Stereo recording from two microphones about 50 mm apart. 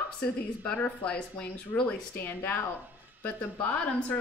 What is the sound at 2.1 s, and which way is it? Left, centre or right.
Speech, left.